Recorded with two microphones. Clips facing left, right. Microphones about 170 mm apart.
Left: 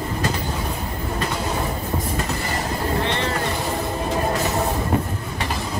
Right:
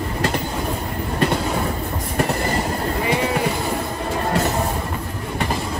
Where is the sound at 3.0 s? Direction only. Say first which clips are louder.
Right 5 dB; 10° right (ahead or behind).